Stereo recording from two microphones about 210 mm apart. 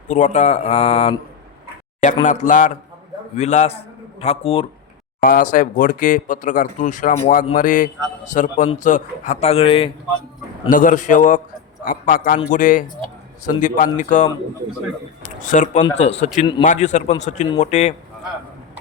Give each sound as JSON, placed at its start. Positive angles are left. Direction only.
{"t": 0.1, "sound": "speech", "side_deg": 35}
{"t": 2.2, "sound": "a man's voice", "side_deg": 35}
{"t": 5.2, "sound": "speech", "side_deg": 40}
{"t": 10.7, "sound": "speech", "side_deg": 40}
{"t": 15.4, "sound": "speech", "side_deg": 35}